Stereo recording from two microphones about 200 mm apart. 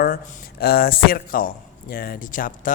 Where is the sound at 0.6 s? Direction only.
50° left (ahead or behind).